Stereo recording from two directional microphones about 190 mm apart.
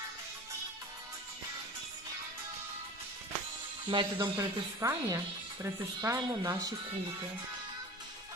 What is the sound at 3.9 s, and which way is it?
Speech, 20° right (ahead or behind).